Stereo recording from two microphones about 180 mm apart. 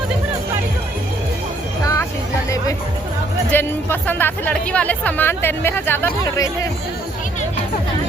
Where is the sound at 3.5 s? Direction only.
10° left (ahead or behind).